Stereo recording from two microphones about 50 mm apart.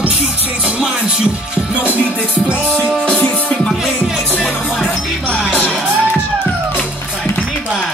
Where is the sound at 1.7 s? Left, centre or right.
Right.